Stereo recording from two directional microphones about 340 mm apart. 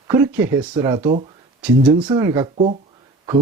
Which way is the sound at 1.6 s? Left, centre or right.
Centre.